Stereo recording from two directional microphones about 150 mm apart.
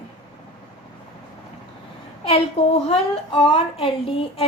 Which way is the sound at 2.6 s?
40° left (ahead or behind).